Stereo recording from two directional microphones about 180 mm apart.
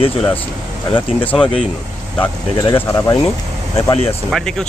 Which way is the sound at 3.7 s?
35° left (ahead or behind).